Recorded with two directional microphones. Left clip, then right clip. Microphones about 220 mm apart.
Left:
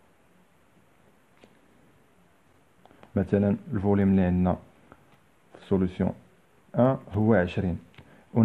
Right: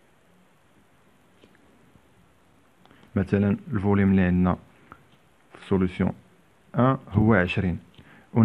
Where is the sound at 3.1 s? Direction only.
10° right (ahead or behind).